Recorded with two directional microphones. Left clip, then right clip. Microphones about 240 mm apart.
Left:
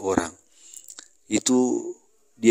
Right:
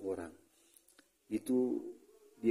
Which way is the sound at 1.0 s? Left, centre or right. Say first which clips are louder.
Left 14 dB; left.